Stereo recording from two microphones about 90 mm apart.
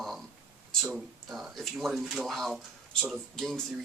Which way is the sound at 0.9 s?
Centre (ahead or behind).